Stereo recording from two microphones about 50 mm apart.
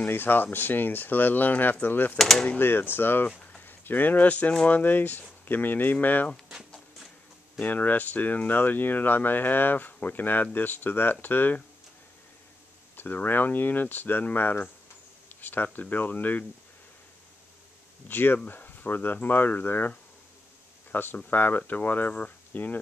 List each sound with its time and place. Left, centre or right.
0.0 s speech: left
2.1 s speech: centre
2.6 s speech: left
3.3 s a sound: left
3.6 s speech: left
7.6 s speech: left
12.9 s speech: left
18.0 s speech: left
20.9 s speech: left